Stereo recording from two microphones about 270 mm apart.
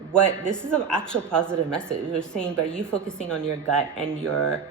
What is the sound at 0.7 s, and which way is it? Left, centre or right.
Speech, centre.